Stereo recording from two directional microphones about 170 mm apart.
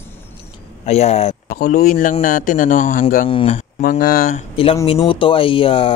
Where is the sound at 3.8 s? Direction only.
55° left (ahead or behind).